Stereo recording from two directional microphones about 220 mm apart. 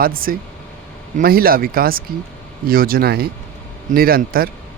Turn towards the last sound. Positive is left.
turn(degrees=-40)  # may be behind; listen again after turning